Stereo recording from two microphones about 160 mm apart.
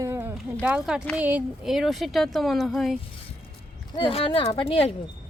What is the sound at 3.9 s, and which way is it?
Speech, 35° left (ahead or behind).